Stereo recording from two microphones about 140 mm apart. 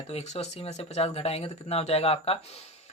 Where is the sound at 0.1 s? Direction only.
45° left (ahead or behind).